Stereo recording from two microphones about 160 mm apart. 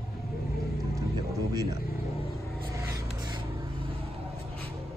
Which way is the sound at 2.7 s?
20° right (ahead or behind).